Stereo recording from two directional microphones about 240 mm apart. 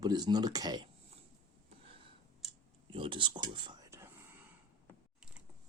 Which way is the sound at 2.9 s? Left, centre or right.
Right.